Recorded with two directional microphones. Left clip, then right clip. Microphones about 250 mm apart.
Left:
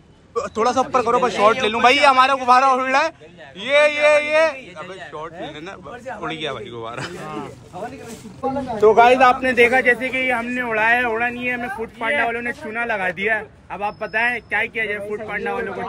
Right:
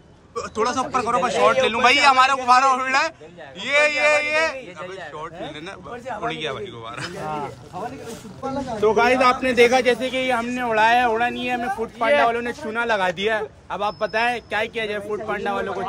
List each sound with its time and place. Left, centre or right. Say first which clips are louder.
0.3 s a man's voice: left 4 dB; centre
7.2 s speech: right 3 dB; right
8.8 s speech: left 5 dB; centre
9.7 s speech: left 2 dB; centre